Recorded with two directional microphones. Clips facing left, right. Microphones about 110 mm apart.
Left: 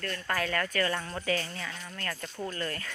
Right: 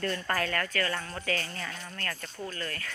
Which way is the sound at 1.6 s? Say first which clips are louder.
Right 1 dB; centre (ahead or behind).